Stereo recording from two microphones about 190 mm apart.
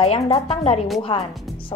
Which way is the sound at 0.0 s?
35° left (ahead or behind).